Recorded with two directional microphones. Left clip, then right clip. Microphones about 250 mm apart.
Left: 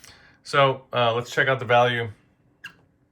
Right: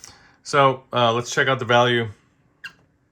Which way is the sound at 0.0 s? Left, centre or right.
Centre.